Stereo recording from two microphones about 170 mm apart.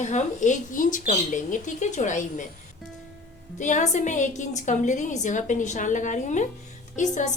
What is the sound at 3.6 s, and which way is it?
Speech, 45° left (ahead or behind).